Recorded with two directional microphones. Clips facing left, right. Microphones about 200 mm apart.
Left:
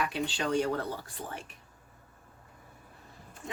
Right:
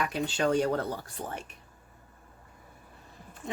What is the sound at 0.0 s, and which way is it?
Speech, 45° right (ahead or behind).